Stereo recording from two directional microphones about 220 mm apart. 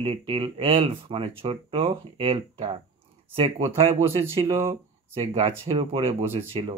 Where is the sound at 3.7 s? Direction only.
25° right (ahead or behind).